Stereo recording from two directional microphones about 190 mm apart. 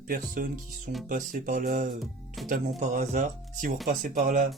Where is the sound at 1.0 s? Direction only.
45° right (ahead or behind).